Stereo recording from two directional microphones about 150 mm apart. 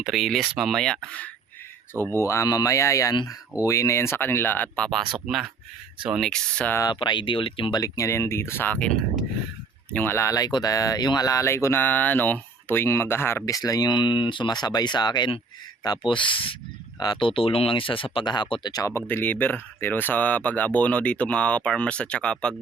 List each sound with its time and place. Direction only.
0.0 s speech: centre (ahead or behind)
6.9 s speech: 35° left (ahead or behind); by 22.5 s 5° left (ahead or behind)